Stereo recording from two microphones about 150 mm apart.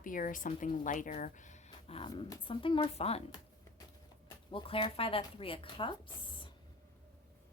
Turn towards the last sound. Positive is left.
turn(degrees=35)  # may be behind; listen again after turning